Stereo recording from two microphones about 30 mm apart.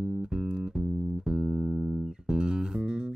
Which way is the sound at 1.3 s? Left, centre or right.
Right.